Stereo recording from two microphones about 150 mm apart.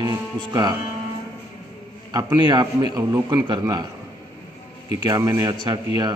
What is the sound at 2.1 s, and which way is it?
A man's voice, 30° right (ahead or behind).